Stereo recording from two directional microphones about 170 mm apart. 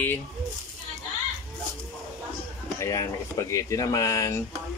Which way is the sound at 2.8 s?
20° left (ahead or behind).